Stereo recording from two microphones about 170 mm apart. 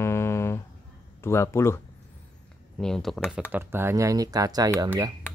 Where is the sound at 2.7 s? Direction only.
5° left (ahead or behind).